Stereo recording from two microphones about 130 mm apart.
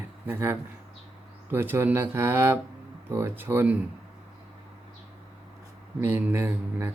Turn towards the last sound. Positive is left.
turn(degrees=-20)  # may be behind; listen again after turning